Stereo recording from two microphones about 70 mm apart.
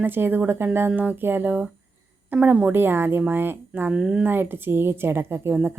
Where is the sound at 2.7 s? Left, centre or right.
Right.